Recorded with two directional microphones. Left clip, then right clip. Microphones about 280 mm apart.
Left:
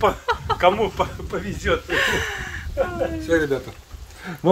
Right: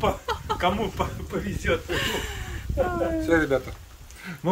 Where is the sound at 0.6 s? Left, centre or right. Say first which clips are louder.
Left 8 dB; centre.